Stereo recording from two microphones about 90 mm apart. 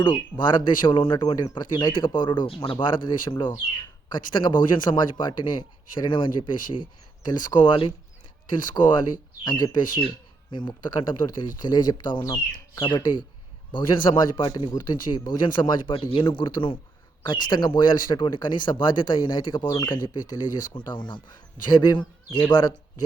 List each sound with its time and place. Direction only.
0.0 s speech: 55° left (ahead or behind)
7.3 s speech: 50° left (ahead or behind)
12.2 s speech: 35° left (ahead or behind)
12.8 s speech: 60° left (ahead or behind)
14.7 s speech: 50° left (ahead or behind)
17.2 s speech: 55° left (ahead or behind)